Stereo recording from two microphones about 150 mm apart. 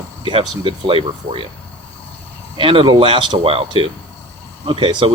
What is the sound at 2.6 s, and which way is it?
Speech, 35° right (ahead or behind).